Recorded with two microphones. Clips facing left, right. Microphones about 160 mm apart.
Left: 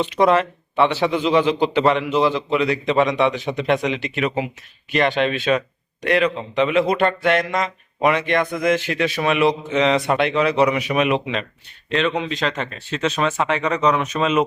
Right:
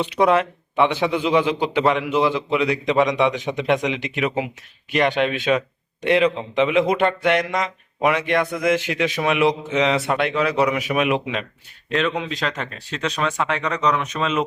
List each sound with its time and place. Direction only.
0.0 s a man's voice: 10° right (ahead or behind)
6.0 s a man's voice: 25° right (ahead or behind); by 14.4 s 10° left (ahead or behind)